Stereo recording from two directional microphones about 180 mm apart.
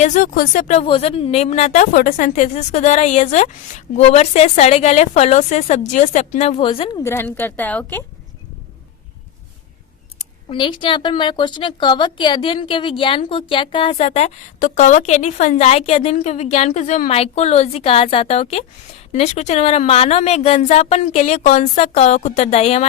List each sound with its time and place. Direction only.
0.0 s speech: 45° left (ahead or behind)
7.0 s a woman's voice: 15° left (ahead or behind)
10.2 s speech: 30° left (ahead or behind)